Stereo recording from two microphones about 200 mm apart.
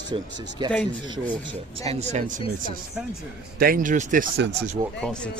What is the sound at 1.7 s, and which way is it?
Speech, 30° right (ahead or behind).